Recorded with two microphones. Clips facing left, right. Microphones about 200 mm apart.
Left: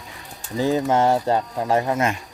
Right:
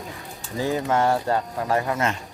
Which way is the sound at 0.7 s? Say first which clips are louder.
Left 3 dB; 25° left (ahead or behind).